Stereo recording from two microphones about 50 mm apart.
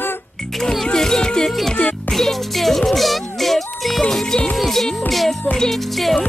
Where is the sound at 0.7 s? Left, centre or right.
Centre.